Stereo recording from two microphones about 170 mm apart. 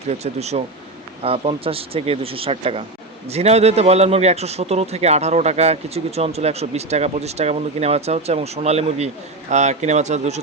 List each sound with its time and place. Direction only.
0.1 s a man's voice: 40° right (ahead or behind)